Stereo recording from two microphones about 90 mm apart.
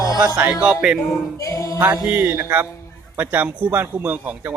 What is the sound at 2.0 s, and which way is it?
Music, 15° right (ahead or behind).